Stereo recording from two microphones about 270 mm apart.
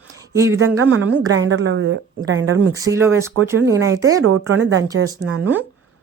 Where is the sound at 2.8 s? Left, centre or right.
Centre.